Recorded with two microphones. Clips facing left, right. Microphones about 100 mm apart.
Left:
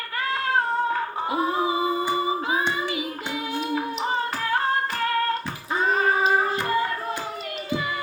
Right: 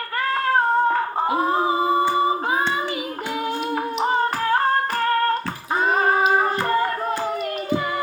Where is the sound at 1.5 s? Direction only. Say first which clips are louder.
Right 4 dB; 40° right (ahead or behind).